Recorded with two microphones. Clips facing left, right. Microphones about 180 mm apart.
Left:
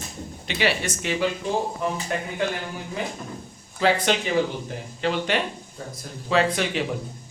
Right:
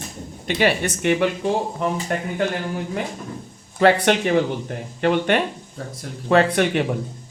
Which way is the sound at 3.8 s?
60° right (ahead or behind).